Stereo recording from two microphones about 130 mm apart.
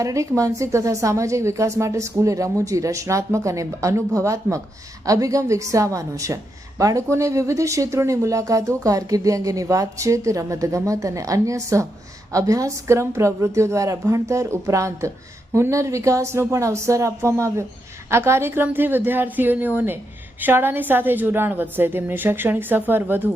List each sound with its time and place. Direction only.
0.0 s a woman's voice: 25° right (ahead or behind)